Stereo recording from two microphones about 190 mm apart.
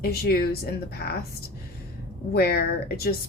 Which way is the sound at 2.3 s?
55° left (ahead or behind).